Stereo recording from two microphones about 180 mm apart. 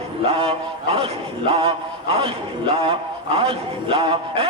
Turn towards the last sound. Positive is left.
turn(degrees=-30)  # may be behind; listen again after turning